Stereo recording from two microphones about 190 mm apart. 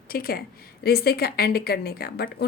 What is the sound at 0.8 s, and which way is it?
Speech, 55° left (ahead or behind).